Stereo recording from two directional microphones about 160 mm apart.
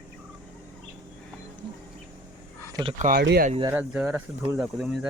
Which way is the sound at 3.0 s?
70° right (ahead or behind).